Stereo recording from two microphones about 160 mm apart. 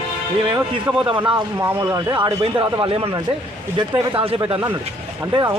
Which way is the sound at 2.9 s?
35° right (ahead or behind).